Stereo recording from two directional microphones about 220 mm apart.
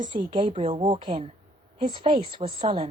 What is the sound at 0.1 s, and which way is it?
A woman's voice, 20° right (ahead or behind).